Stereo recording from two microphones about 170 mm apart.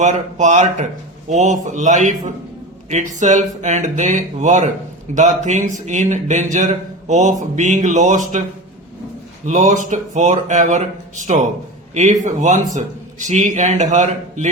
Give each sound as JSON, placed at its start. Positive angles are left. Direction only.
{"t": 0.0, "sound": "speech", "side_deg": -45}
{"t": 9.5, "sound": "speech", "side_deg": -45}